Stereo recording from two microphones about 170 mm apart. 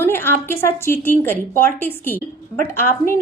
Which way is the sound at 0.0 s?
15° left (ahead or behind).